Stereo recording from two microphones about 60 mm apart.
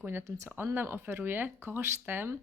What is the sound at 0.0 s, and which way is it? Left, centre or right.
Speech, right.